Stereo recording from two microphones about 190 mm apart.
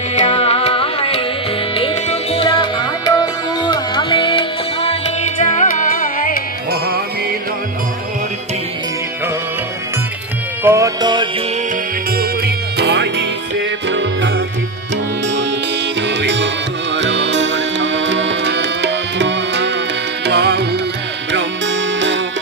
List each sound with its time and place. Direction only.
0.1 s music: 35° left (ahead or behind)
10.6 s music: 15° right (ahead or behind)
12.2 s music: 60° right (ahead or behind); by 14.3 s 75° right (ahead or behind)
16.0 s music: 70° right (ahead or behind)